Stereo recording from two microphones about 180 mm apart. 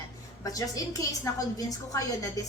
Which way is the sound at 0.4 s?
20° left (ahead or behind).